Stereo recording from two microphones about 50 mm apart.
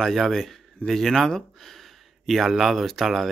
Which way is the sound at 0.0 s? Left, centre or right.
Centre.